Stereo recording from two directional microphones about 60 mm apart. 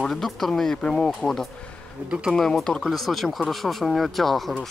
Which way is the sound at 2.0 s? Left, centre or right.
Centre.